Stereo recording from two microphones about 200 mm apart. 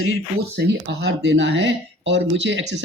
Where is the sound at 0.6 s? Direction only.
55° right (ahead or behind).